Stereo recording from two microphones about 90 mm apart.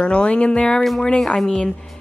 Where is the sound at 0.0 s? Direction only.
10° left (ahead or behind).